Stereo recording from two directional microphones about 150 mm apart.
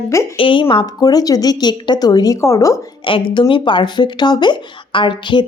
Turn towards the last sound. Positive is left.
turn(degrees=35)  # may be behind; listen again after turning